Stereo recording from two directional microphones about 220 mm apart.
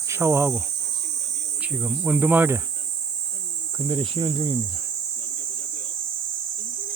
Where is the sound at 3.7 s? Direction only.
20° right (ahead or behind).